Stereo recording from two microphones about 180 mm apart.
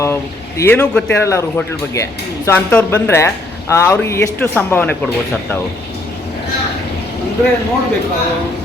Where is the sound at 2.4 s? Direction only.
10° left (ahead or behind).